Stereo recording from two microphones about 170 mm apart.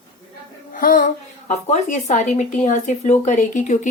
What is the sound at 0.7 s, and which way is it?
A woman's voice, 50° left (ahead or behind).